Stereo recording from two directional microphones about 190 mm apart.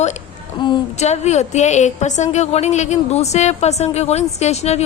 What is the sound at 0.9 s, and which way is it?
A woman's voice, 35° left (ahead or behind).